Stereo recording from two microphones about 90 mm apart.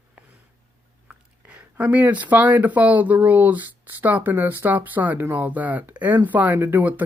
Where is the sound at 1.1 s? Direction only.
15° right (ahead or behind).